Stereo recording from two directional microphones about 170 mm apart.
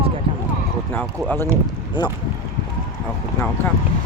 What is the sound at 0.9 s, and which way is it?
Speech, 10° left (ahead or behind).